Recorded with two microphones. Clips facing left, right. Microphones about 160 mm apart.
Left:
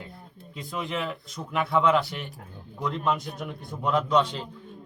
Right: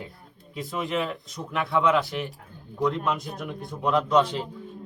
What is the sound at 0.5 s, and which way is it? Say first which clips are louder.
Speech: right 4 dB; centre (ahead or behind).